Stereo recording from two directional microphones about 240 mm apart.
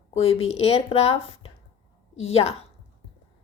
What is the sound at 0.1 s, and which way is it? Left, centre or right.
Speech, left.